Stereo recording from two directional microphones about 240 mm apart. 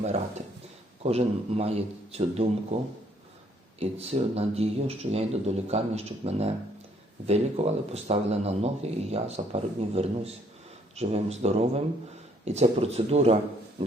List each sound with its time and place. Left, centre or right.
0.0 s speech: right